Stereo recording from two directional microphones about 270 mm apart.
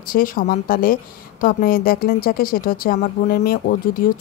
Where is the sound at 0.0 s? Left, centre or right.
Left.